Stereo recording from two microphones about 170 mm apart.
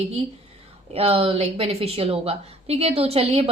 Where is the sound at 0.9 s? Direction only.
35° right (ahead or behind).